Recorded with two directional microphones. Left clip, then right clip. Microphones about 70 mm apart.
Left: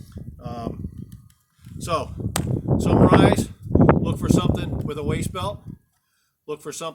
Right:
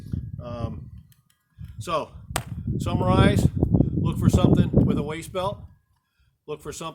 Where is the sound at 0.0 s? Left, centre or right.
Right.